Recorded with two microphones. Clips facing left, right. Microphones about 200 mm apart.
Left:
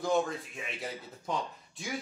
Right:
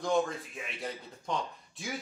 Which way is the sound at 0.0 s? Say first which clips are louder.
Even; centre (ahead or behind).